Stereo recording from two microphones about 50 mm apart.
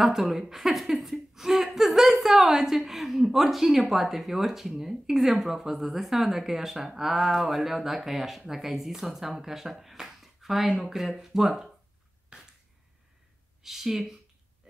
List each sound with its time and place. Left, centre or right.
0.0 s a woman's voice: centre
12.3 s finger snapping: centre
13.6 s speech: centre